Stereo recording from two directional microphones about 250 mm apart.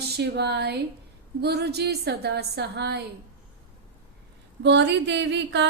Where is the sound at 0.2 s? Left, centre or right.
Right.